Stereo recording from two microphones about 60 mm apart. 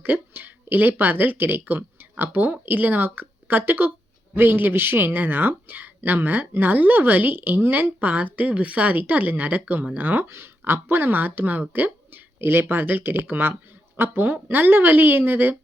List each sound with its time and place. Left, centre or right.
0.0 s speech: right
10.2 s speech: right